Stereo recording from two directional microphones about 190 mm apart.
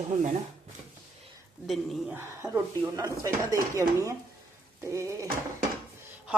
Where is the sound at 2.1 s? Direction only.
15° right (ahead or behind).